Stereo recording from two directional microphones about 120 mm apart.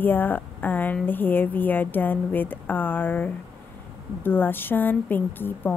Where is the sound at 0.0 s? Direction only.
15° left (ahead or behind).